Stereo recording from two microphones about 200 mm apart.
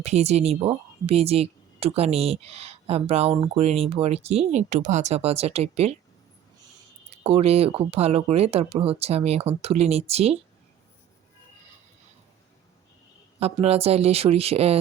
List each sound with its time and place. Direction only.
0.0 s speech: 30° right (ahead or behind)
7.1 s speech: 30° right (ahead or behind)
13.4 s speech: 30° right (ahead or behind)